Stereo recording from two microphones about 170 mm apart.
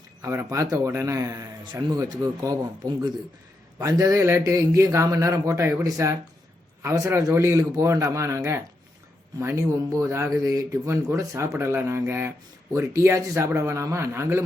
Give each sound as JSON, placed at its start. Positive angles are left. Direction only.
{"t": 0.2, "sound": "a man's voice", "side_deg": -15}